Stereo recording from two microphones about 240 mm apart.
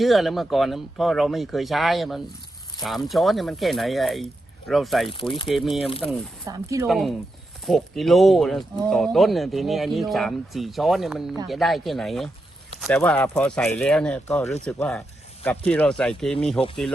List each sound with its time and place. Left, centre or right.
0.0 s speech: centre
6.8 s speech: centre